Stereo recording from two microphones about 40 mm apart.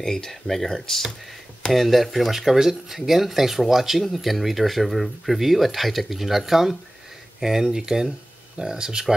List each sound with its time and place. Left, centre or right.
0.0 s speech: centre